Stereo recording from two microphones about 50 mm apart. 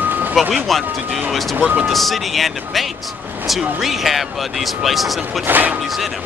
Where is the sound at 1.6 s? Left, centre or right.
Right.